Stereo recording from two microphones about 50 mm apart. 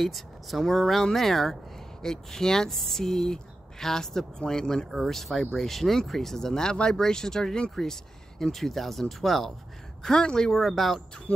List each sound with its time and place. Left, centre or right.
0.0 s speech: centre
11.3 s insect: left